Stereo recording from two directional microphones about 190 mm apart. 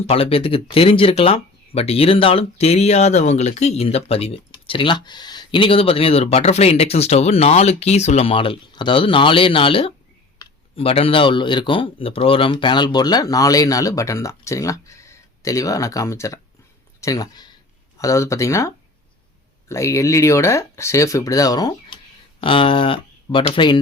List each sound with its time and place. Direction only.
0.1 s speech: 30° left (ahead or behind)